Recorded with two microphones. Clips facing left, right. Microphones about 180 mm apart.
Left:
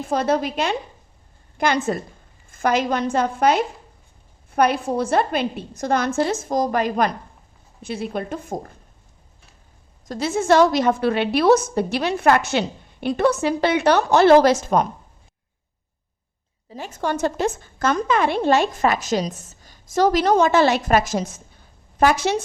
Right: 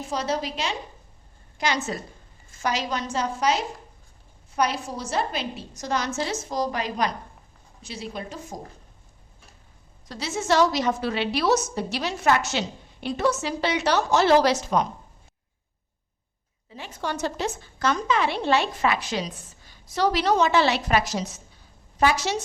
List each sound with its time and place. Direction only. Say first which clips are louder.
0.0 s a woman's voice: left 7 dB; 55° left (ahead or behind)
10.1 s a woman's voice: left 7 dB; 50° left (ahead or behind)
16.6 s a woman's voice: left 6 dB; 40° left (ahead or behind)